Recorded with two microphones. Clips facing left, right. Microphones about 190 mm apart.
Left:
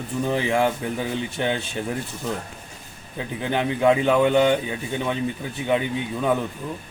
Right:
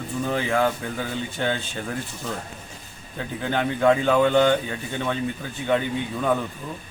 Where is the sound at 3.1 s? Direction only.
15° left (ahead or behind).